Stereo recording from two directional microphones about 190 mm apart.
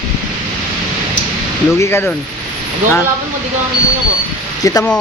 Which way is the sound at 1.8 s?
10° left (ahead or behind).